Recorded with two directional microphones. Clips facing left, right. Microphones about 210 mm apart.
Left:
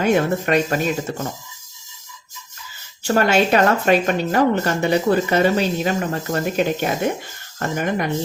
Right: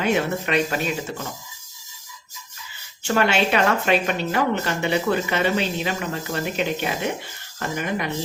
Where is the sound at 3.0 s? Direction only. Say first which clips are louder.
Left 4 dB; 40° left (ahead or behind).